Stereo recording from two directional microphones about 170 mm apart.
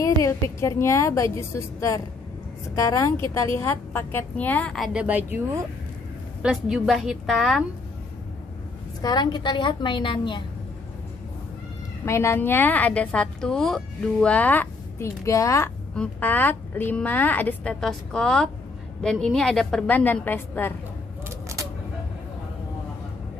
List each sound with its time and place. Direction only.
0.0 s a woman's voice: 15° left (ahead or behind); by 5.4 s 10° right (ahead or behind)
6.4 s a woman's voice: centre (ahead or behind)
9.0 s a woman's voice: 25° left (ahead or behind)
12.0 s a woman's voice: 15° left (ahead or behind)